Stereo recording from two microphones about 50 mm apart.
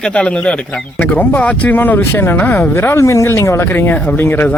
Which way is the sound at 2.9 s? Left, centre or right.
Left.